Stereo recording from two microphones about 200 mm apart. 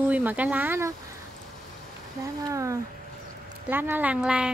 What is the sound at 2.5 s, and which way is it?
Speech, 15° right (ahead or behind).